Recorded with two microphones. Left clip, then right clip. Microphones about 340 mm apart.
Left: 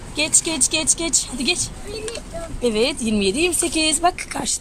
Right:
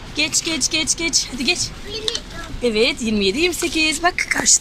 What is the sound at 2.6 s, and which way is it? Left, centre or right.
Speech, centre.